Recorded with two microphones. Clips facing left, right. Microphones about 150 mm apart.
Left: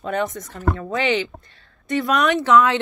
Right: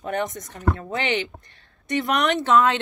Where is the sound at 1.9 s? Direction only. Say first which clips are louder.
Left 3 dB; 20° right (ahead or behind).